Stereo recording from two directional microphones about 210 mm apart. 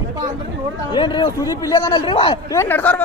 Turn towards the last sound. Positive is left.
turn(degrees=10)  # may be behind; listen again after turning